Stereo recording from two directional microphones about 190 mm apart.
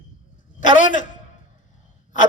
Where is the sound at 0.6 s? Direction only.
40° left (ahead or behind).